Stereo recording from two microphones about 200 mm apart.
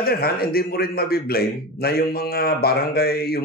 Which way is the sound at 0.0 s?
50° left (ahead or behind).